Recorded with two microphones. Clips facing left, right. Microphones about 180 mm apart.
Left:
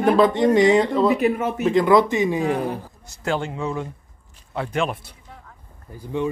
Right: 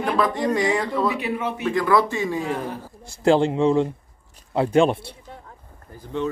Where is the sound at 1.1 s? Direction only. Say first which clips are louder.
Left 6 dB; 45° left (ahead or behind).